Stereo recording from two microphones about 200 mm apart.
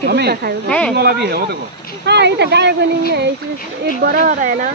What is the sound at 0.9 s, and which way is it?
Speech, 55° right (ahead or behind).